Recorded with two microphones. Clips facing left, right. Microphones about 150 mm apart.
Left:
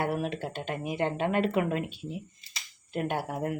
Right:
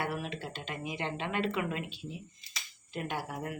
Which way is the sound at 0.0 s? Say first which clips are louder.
Left 6 dB; 50° left (ahead or behind).